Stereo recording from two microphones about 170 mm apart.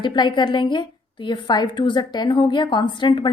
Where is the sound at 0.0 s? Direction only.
25° left (ahead or behind).